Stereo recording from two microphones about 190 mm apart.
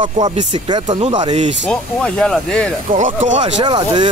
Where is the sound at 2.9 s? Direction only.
40° right (ahead or behind).